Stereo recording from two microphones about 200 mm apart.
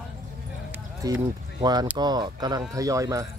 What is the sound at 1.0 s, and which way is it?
Speech, 20° right (ahead or behind).